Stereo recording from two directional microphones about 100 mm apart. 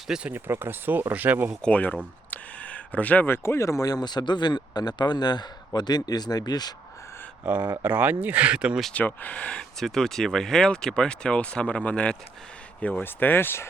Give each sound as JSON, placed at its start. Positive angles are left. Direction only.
{"t": 0.1, "sound": "speech", "side_deg": -10}
{"t": 0.3, "sound": "speech", "side_deg": -20}
{"t": 1.6, "sound": "speech", "side_deg": 15}
{"t": 7.4, "sound": "speech", "side_deg": -15}
{"t": 8.9, "sound": "speech", "side_deg": 15}